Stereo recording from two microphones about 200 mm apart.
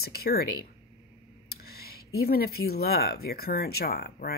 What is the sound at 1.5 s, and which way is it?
Speech, 50° left (ahead or behind).